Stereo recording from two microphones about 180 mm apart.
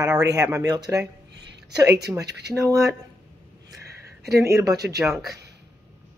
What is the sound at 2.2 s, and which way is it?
Speech, 70° right (ahead or behind).